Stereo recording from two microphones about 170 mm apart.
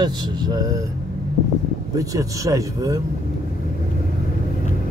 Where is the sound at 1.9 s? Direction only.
20° right (ahead or behind).